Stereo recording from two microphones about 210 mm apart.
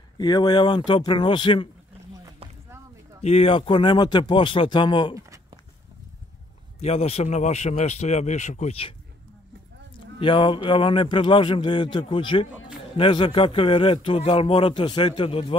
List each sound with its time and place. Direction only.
0.2 s a man's voice: 20° left (ahead or behind)
3.2 s a man's voice: 30° left (ahead or behind)
6.8 s speech: 30° left (ahead or behind)
10.1 s a man's voice: 25° left (ahead or behind)